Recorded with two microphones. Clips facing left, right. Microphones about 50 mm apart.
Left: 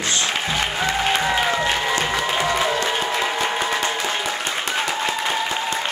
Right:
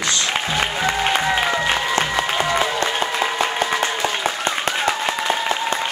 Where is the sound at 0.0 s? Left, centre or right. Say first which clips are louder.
Right 1 dB; left.